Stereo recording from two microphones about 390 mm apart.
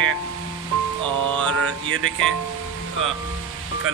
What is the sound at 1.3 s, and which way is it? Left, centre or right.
Mantra, centre.